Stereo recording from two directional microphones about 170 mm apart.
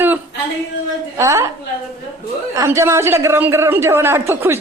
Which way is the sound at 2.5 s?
15° right (ahead or behind).